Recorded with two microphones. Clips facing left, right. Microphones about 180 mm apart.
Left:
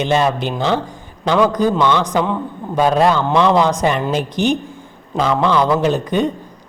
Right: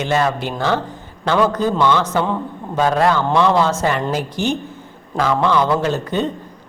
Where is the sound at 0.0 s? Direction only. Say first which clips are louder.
Left 2 dB; 20° left (ahead or behind).